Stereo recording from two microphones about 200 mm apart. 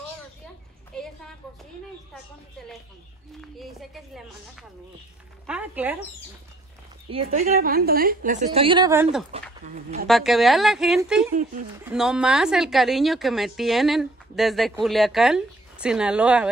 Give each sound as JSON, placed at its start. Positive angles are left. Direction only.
{"t": 3.3, "sound": "a woman's voice", "side_deg": 0}
{"t": 7.1, "sound": "a woman's voice", "side_deg": -30}
{"t": 8.5, "sound": "speech", "side_deg": -25}
{"t": 9.3, "sound": "a woman's voice", "side_deg": -35}
{"t": 10.0, "sound": "a woman's voice", "side_deg": 0}